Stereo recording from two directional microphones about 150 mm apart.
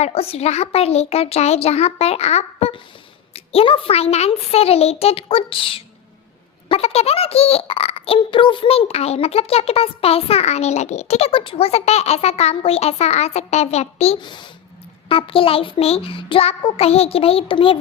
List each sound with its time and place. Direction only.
0.0 s a child's voice: 40° left (ahead or behind)
14.2 s a child's voice: 30° left (ahead or behind)